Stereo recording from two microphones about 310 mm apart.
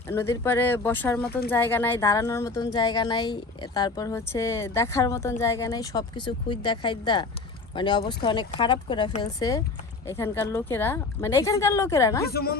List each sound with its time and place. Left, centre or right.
0.1 s speech: centre
12.3 s speech: left